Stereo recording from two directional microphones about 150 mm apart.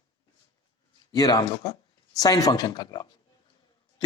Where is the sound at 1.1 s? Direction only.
25° left (ahead or behind).